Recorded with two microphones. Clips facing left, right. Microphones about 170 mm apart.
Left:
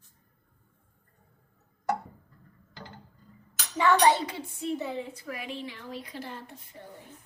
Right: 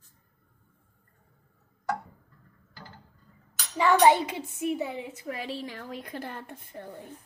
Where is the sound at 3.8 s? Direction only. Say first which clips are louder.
Right 2 dB; 10° right (ahead or behind); by 6.8 s 55° right (ahead or behind).